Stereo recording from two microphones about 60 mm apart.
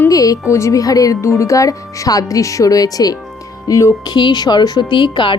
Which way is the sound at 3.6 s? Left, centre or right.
Left.